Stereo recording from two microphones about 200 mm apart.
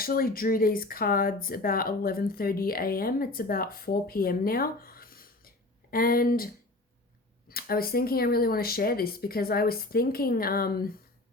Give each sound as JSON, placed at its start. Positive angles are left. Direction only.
{"t": 0.0, "sound": "speech", "side_deg": 45}